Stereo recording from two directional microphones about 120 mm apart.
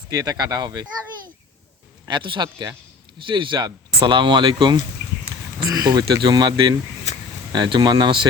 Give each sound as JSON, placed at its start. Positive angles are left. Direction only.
{"t": 0.1, "sound": "speech", "side_deg": -30}
{"t": 2.0, "sound": "speech", "side_deg": -40}